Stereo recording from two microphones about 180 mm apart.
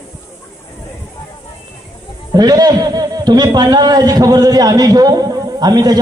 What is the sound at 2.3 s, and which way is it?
A man's voice, 20° right (ahead or behind).